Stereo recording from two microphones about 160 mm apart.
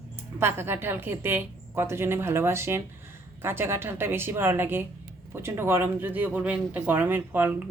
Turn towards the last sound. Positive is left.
turn(degrees=-10)  # may be behind; listen again after turning